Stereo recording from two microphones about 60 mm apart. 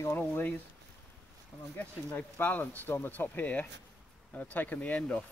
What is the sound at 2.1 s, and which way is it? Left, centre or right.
Speech, left.